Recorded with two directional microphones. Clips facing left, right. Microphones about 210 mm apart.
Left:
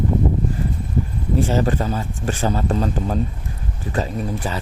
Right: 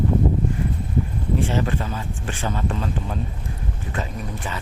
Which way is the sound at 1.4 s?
40° left (ahead or behind).